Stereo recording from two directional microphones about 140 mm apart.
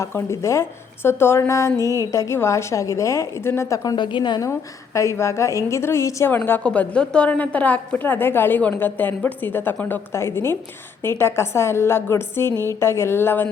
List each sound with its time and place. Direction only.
0.0 s a woman's voice: 20° left (ahead or behind)
1.8 s music: 25° right (ahead or behind)
2.1 s a woman's voice: 20° left (ahead or behind)